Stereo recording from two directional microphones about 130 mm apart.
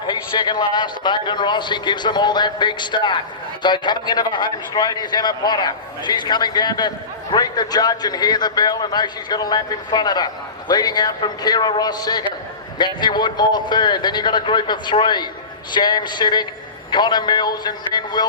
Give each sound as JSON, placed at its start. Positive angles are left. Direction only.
{"t": 0.0, "sound": "a man's voice", "side_deg": 35}